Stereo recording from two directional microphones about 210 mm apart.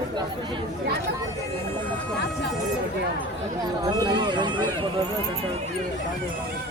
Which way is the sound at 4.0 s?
20° right (ahead or behind).